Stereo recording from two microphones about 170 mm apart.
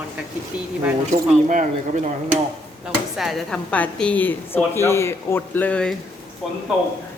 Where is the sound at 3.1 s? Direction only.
Centre (ahead or behind).